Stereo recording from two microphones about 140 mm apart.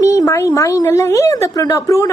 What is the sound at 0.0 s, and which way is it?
A woman's voice, 25° left (ahead or behind).